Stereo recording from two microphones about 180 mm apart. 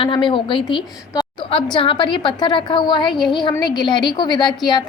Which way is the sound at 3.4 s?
25° left (ahead or behind).